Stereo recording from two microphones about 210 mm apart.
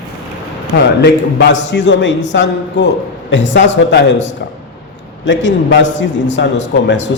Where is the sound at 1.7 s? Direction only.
60° left (ahead or behind).